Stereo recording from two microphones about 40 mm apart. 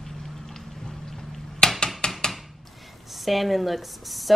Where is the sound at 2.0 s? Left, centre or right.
Left.